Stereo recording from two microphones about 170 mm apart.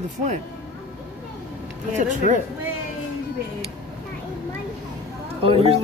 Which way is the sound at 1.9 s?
50° right (ahead or behind).